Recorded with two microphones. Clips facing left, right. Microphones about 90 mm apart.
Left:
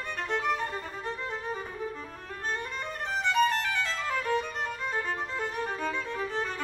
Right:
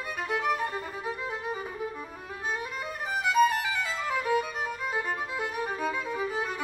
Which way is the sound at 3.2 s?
10° right (ahead or behind).